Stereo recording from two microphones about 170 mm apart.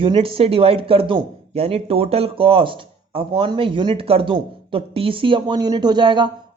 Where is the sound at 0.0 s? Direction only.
30° right (ahead or behind).